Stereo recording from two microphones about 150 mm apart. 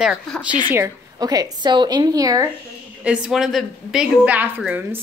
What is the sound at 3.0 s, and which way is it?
A woman's voice, 5° right (ahead or behind).